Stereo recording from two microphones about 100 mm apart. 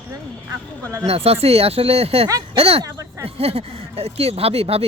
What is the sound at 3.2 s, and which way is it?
Speech, 80° right.